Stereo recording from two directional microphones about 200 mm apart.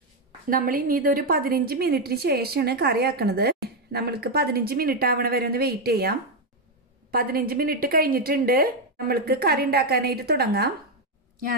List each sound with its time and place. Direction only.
0.5 s a woman's voice: 45° right (ahead or behind)